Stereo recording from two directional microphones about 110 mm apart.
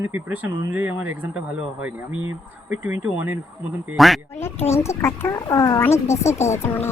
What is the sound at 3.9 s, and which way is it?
Speech, centre (ahead or behind).